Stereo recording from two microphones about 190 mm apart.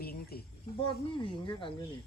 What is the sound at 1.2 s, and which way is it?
Speech, 25° left (ahead or behind).